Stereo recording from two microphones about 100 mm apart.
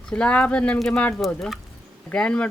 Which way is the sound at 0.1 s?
10° left (ahead or behind).